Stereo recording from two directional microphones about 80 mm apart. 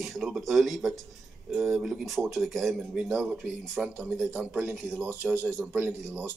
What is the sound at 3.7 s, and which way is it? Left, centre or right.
Speech, centre.